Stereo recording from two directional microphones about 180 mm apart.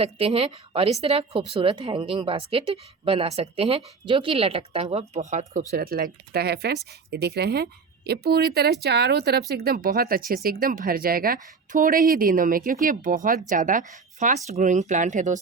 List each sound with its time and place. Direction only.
0.0 s speech: 35° right (ahead or behind)
5.7 s speech: 55° right (ahead or behind)